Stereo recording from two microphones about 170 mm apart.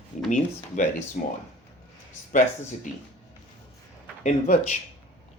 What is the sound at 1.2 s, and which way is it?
Speech, 50° left (ahead or behind).